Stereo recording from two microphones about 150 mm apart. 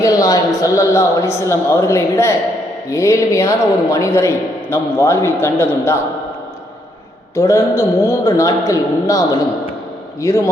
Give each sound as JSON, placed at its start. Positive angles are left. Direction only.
{"t": 0.0, "sound": "a man's voice", "side_deg": 25}
{"t": 7.3, "sound": "a man's voice", "side_deg": 20}